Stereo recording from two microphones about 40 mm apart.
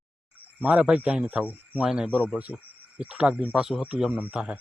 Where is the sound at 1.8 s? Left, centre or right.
Right.